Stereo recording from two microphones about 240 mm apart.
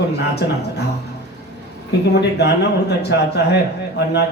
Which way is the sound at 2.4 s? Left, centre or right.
Left.